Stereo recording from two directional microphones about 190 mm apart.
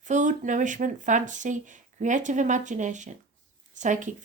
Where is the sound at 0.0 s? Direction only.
40° right (ahead or behind).